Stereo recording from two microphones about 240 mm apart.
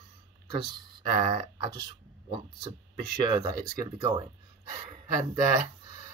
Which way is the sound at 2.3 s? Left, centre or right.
Centre.